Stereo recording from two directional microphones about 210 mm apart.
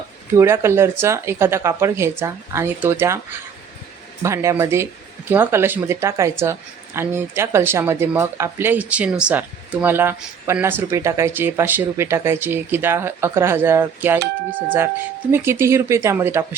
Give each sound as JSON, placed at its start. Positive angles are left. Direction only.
{"t": 0.3, "sound": "speech", "side_deg": -10}
{"t": 4.2, "sound": "speech", "side_deg": -15}
{"t": 15.3, "sound": "speech", "side_deg": -10}